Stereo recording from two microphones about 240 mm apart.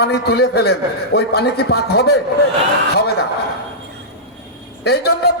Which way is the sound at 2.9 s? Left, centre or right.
Left.